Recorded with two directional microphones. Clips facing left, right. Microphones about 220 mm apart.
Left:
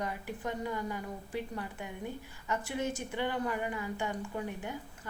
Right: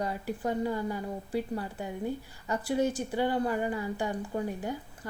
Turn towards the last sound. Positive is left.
turn(degrees=-35)  # may be behind; listen again after turning